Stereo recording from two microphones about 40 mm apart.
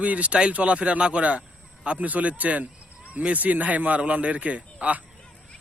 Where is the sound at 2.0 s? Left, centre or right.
Right.